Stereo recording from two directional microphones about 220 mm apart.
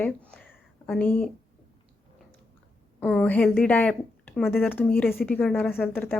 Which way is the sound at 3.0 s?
5° left (ahead or behind).